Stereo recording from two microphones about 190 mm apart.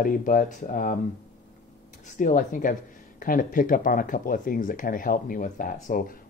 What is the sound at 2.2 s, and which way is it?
Speech, 45° left (ahead or behind).